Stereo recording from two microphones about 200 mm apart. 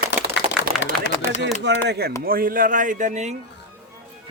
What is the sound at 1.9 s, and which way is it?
Speech, 55° right (ahead or behind).